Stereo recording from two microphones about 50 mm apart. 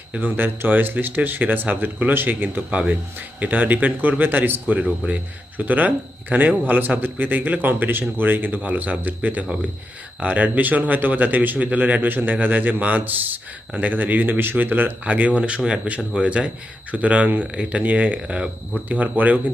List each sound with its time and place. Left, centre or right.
0.1 s speech: right
2.6 s speech: right
18.3 s speech: centre
18.9 s speech: right